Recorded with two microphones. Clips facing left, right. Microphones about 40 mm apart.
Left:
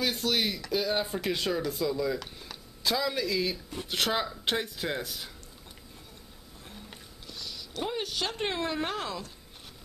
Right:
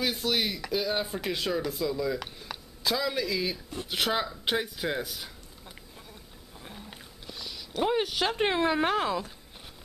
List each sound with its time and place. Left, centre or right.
0.0 s speech: centre
6.9 s a sound: centre
7.9 s speech: centre